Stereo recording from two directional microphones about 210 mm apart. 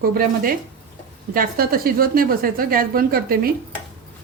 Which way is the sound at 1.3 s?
45° right (ahead or behind).